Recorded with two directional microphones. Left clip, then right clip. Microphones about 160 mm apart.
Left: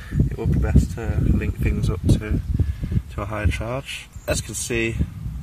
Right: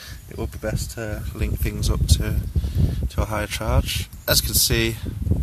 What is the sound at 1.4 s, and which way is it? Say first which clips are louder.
Speech: left 2 dB; 20° right (ahead or behind).